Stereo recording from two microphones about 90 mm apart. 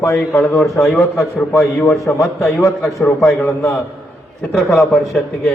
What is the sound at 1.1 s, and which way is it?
A man's voice, 35° left (ahead or behind).